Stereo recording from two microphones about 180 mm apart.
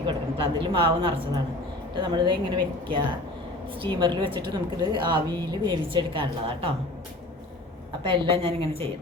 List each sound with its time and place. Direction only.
0.0 s a woman's voice: 30° right (ahead or behind)
8.1 s a woman's voice: 30° right (ahead or behind)